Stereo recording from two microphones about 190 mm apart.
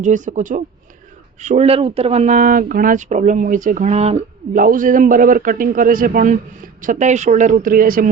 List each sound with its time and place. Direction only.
0.0 s speech: 40° right (ahead or behind)
4.6 s a man's voice: 45° right (ahead or behind)